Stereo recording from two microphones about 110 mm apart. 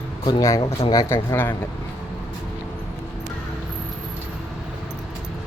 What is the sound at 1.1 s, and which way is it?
Speech, 20° left (ahead or behind).